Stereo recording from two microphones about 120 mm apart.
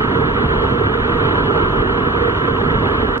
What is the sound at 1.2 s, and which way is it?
Vehicle, 20° right (ahead or behind).